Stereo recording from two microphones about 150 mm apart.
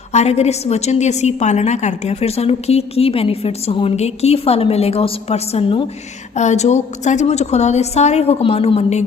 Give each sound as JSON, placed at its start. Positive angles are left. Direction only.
{"t": 0.1, "sound": "a woman's voice", "side_deg": 45}
{"t": 6.3, "sound": "a woman's voice", "side_deg": 50}